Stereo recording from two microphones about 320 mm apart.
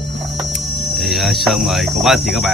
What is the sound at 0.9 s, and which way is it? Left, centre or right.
Speech, centre.